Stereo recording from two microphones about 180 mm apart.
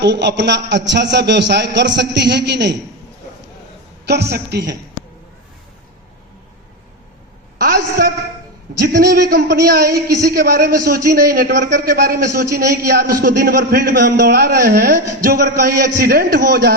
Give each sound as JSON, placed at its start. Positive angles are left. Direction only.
{"t": 0.0, "sound": "a man's voice", "side_deg": -75}
{"t": 4.0, "sound": "a man's voice", "side_deg": -70}
{"t": 7.6, "sound": "speech", "side_deg": -60}